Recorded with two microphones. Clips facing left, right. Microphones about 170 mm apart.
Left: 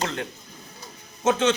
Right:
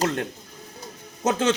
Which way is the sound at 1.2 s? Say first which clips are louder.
Left 1 dB; 40° right (ahead or behind).